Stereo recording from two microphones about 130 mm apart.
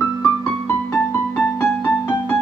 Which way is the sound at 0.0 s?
20° left (ahead or behind).